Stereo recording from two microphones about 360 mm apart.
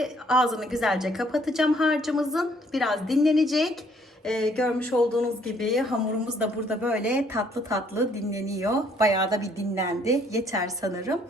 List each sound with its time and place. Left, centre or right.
0.0 s a woman's voice: centre